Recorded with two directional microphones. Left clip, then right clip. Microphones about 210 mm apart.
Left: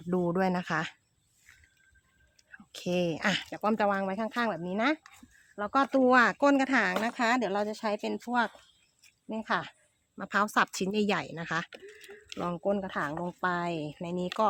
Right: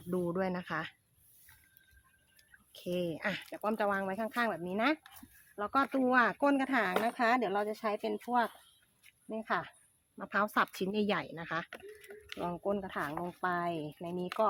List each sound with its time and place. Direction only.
0.1 s speech: 35° left (ahead or behind)
2.7 s speech: 40° left (ahead or behind)
9.3 s speech: 50° left (ahead or behind)
11.7 s speech: 20° left (ahead or behind)
12.4 s speech: 50° left (ahead or behind)